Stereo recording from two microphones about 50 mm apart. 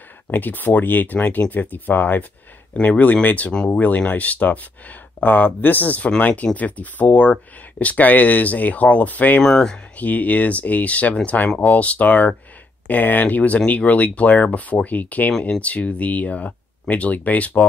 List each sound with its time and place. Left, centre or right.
0.3 s speech: left
3.5 s speech: centre
3.8 s speech: left
9.4 s speech: centre
9.9 s speech: left